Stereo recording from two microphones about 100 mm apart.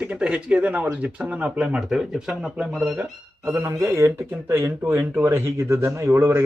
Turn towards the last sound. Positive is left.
turn(degrees=-25)  # may be behind; listen again after turning